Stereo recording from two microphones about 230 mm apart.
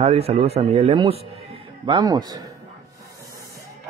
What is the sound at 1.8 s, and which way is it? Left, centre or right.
Speech, centre.